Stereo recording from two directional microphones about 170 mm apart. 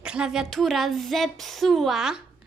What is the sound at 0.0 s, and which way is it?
A child's voice, 5° right (ahead or behind).